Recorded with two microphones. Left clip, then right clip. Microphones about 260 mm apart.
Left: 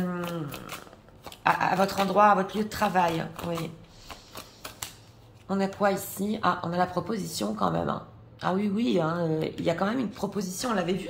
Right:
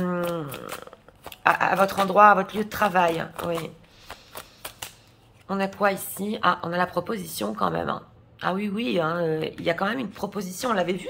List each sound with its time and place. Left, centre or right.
0.0 s a sound: right
1.2 s speech: centre
5.5 s a woman's voice: centre